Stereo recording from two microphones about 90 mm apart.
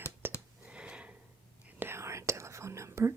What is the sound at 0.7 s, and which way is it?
Sniff, 10° right (ahead or behind).